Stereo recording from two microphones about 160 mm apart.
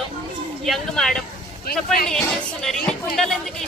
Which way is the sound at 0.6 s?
Centre (ahead or behind).